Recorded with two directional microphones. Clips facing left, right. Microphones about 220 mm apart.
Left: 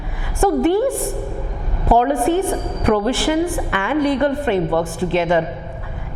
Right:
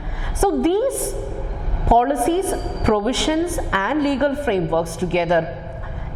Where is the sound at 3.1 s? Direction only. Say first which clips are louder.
Left 1 dB; 10° left (ahead or behind).